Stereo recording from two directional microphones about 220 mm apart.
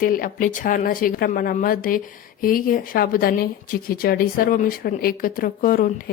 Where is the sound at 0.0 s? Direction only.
40° left (ahead or behind).